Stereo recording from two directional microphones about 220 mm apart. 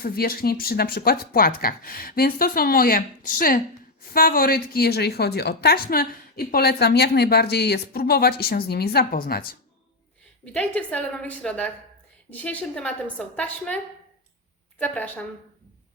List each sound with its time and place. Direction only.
0.0 s a woman's voice: 45° left (ahead or behind)
10.4 s a woman's voice: 5° left (ahead or behind)
14.8 s speech: 5° left (ahead or behind)